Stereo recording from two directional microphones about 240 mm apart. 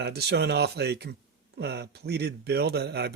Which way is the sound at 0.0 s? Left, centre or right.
Right.